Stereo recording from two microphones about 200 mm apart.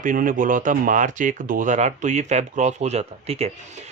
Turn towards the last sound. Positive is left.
turn(degrees=-30)  # may be behind; listen again after turning